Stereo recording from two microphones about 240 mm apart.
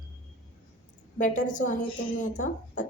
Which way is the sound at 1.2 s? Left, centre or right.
Left.